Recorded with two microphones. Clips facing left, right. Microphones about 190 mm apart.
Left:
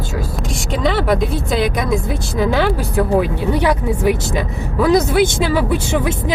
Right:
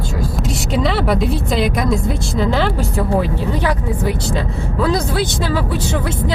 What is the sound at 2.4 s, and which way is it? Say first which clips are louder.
Speech: left 2 dB; 15° left (ahead or behind).